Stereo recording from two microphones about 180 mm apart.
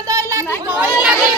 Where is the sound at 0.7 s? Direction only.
10° right (ahead or behind).